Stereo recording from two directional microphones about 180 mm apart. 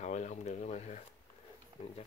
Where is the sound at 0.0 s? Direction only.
40° left (ahead or behind).